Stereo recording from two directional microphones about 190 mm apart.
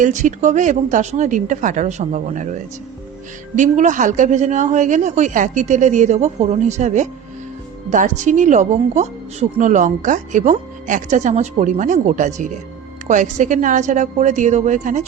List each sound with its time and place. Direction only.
0.0 s speech: 40° right (ahead or behind)